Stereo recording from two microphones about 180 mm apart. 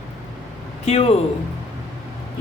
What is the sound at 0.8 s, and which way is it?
Speech, 35° left (ahead or behind).